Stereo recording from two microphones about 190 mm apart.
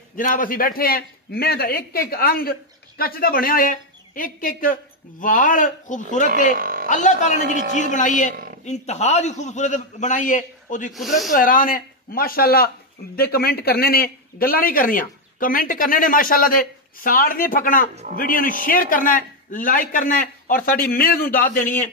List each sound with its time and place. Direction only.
0.1 s speech: 45° left (ahead or behind)
6.5 s speech: 50° right (ahead or behind)
6.9 s a man's voice: 40° left (ahead or behind)
10.9 s speech: centre (ahead or behind)
11.3 s speech: 45° left (ahead or behind)